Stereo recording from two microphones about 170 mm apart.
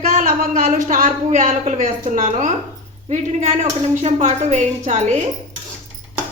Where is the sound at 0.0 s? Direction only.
55° right (ahead or behind).